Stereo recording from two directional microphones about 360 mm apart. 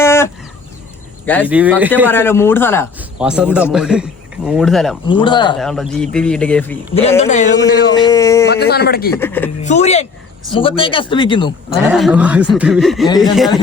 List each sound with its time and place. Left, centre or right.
0.0 s chicken: centre
1.3 s a man's voice: centre
5.0 s a man's voice: centre
5.5 s a man's voice: centre
6.9 s a man's voice: centre
7.6 s a man's voice: centre
8.4 s speech: left
9.1 s a man's voice: centre
9.6 s a man's voice: centre
11.9 s a man's voice: centre